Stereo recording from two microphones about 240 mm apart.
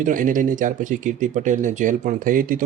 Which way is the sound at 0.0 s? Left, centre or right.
Right.